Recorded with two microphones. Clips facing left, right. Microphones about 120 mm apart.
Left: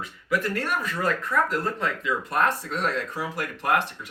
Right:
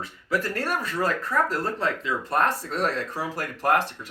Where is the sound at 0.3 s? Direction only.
40° right (ahead or behind).